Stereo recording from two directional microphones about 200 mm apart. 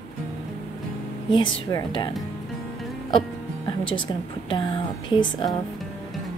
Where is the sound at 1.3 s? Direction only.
75° left (ahead or behind).